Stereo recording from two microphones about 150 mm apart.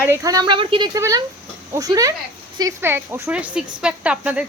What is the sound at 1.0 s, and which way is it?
A woman's voice, 20° right (ahead or behind).